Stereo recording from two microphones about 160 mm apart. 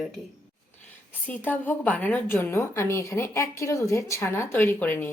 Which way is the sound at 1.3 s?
10° left (ahead or behind).